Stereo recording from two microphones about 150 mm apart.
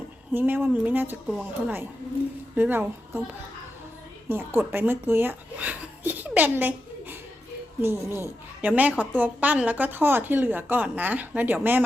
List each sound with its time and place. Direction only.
0.3 s a woman's voice: 15° right (ahead or behind)
4.3 s a woman's voice: 15° right (ahead or behind)